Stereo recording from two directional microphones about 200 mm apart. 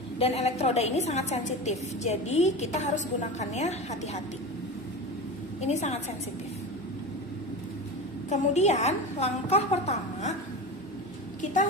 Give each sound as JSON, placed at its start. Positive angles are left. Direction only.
{"t": 0.2, "sound": "a woman's voice", "side_deg": 30}
{"t": 5.5, "sound": "a woman's voice", "side_deg": 35}
{"t": 8.3, "sound": "a woman's voice", "side_deg": 35}